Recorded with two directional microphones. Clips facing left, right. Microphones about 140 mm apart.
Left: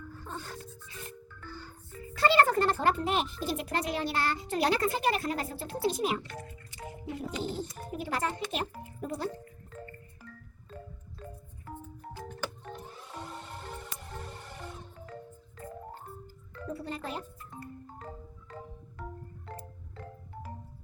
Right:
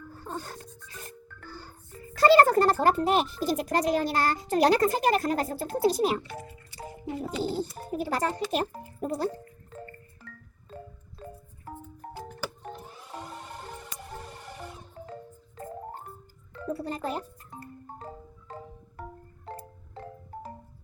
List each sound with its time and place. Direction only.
0.3 s a child's voice: 40° right (ahead or behind)
2.1 s a child's voice: 40° right (ahead or behind)
7.4 s a child's voice: 35° right (ahead or behind)
8.8 s music: 40° right (ahead or behind)
10.3 s music: 70° right (ahead or behind)
11.2 s music: 30° right (ahead or behind)
12.0 s music: 50° right (ahead or behind)
16.6 s music: 40° right (ahead or behind)
19.5 s music: 25° right (ahead or behind)